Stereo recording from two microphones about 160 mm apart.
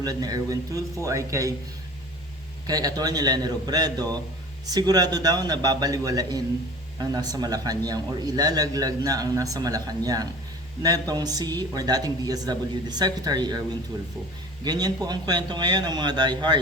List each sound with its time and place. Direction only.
0.0 s speech: 25° right (ahead or behind)
2.6 s speech: 25° right (ahead or behind)